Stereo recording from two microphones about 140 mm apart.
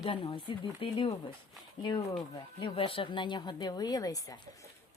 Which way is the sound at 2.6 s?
40° left (ahead or behind).